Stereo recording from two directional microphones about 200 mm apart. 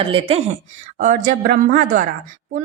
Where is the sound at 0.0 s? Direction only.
25° right (ahead or behind).